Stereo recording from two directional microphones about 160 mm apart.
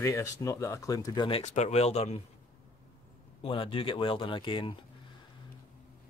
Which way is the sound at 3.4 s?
35° left (ahead or behind).